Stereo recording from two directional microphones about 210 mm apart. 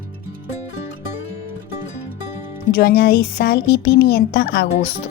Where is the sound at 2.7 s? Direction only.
50° left (ahead or behind).